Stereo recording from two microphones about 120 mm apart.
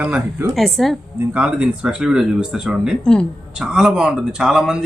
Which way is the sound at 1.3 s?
10° right (ahead or behind).